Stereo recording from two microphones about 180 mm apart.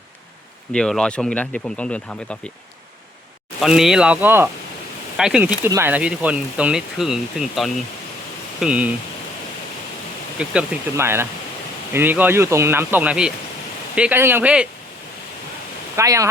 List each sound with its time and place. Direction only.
0.7 s speech: 5° left (ahead or behind)
3.6 s speech: centre (ahead or behind)
10.3 s speech: 5° right (ahead or behind)
16.0 s speech: 15° right (ahead or behind)